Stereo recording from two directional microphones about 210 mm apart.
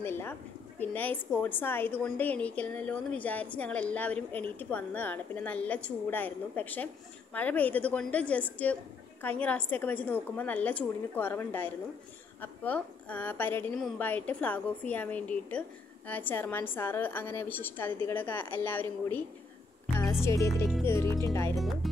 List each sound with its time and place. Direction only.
0.0 s a woman's voice: 10° left (ahead or behind)
21.5 s music: centre (ahead or behind)